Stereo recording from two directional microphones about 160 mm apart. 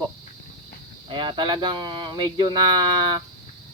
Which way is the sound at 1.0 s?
30° right (ahead or behind).